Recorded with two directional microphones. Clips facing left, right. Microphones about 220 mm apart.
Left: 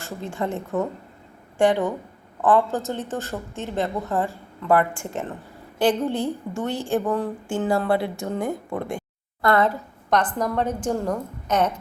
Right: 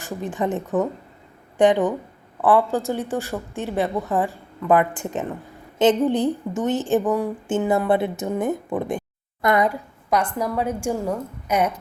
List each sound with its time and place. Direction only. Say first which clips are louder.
0.0 s a woman's voice: right 3 dB; 15° right (ahead or behind)